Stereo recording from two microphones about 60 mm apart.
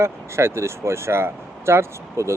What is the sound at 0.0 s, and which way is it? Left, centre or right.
Speech, right.